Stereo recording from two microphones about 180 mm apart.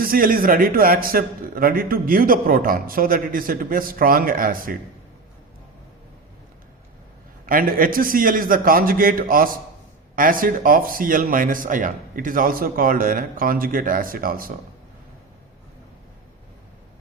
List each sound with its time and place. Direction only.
0.0 s a man's voice: 50° right (ahead or behind)
7.4 s a man's voice: 50° right (ahead or behind)